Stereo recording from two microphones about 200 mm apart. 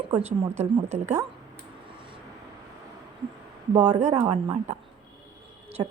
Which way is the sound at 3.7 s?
35° right (ahead or behind).